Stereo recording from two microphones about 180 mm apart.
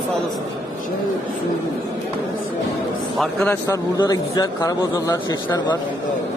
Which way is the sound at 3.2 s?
10° left (ahead or behind).